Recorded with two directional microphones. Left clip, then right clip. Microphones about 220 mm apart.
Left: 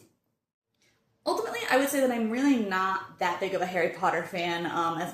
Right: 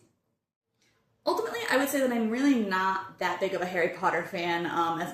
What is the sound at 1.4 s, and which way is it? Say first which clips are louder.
A woman's voice: left 3 dB; centre (ahead or behind).